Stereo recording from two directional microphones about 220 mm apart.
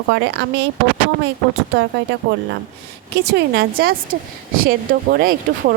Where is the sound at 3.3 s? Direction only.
45° right (ahead or behind).